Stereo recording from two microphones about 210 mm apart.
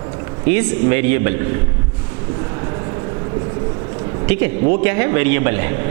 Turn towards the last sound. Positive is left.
turn(degrees=-15)  # may be behind; listen again after turning